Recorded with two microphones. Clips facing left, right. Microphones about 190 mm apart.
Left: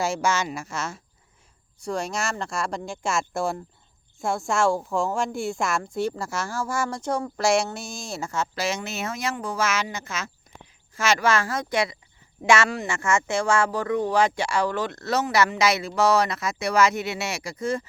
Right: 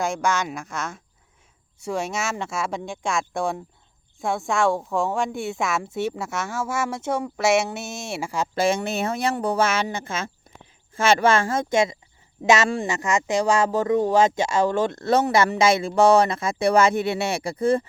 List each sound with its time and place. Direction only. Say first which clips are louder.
0.0 s a woman's voice: right 1 dB; 5° left (ahead or behind)
8.5 s speech: right 10 dB; 55° right (ahead or behind)
9.0 s speech: right 5 dB; 30° right (ahead or behind)